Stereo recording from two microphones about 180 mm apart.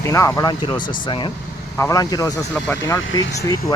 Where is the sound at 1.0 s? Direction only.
25° left (ahead or behind).